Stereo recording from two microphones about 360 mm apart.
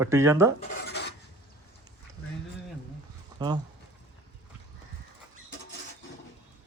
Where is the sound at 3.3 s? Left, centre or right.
Centre.